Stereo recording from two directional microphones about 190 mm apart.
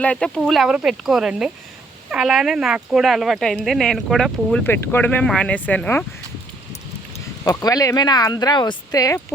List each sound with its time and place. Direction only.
0.0 s speech: 5° left (ahead or behind)
7.4 s speech: 20° left (ahead or behind)